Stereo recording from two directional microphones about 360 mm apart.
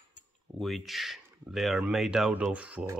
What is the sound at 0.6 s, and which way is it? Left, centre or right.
Speech, centre.